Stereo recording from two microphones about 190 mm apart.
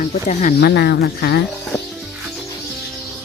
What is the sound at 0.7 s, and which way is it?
Speech, 60° left (ahead or behind).